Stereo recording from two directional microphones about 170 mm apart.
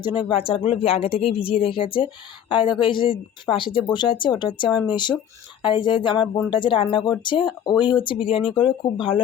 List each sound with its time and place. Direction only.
0.0 s speech: 30° left (ahead or behind)